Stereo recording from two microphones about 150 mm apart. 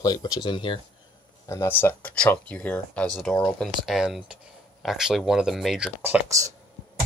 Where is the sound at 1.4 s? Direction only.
20° left (ahead or behind); by 6.5 s 20° right (ahead or behind).